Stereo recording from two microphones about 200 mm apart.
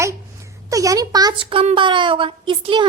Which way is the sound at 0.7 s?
15° right (ahead or behind).